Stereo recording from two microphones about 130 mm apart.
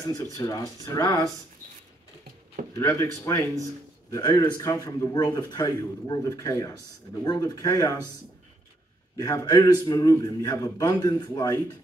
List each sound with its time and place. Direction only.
0.1 s a man's voice: 30° left (ahead or behind)
2.7 s a man's voice: 20° left (ahead or behind)
9.1 s a man's voice: 25° left (ahead or behind)